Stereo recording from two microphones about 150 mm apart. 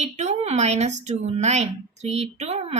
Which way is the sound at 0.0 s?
45° right (ahead or behind).